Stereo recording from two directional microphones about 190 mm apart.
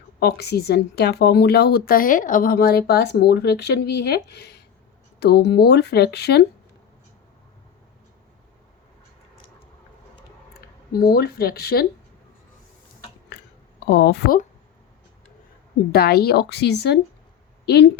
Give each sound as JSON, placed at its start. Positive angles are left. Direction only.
{"t": 0.2, "sound": "speech", "side_deg": 60}
{"t": 11.1, "sound": "speech", "side_deg": 55}
{"t": 13.9, "sound": "speech", "side_deg": 60}
{"t": 15.9, "sound": "speech", "side_deg": 55}